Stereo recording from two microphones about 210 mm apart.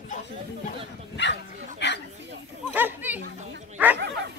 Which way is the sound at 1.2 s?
60° left (ahead or behind).